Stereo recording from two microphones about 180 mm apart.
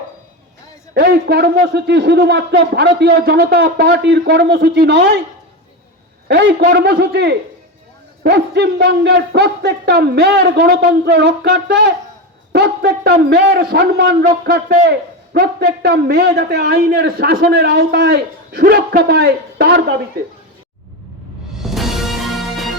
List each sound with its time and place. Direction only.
0.9 s speech: 65° right (ahead or behind)
6.7 s a man's voice: 65° right (ahead or behind)
21.6 s music: centre (ahead or behind)